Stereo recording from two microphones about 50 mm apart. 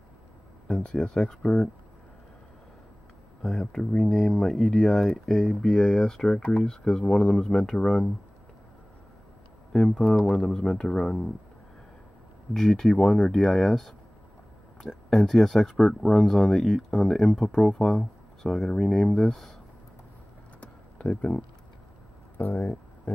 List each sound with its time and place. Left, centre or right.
0.8 s speech: left
3.4 s speech: centre
9.9 s speech: centre
12.5 s speech: centre
20.6 s a sound: left
22.6 s a sound: left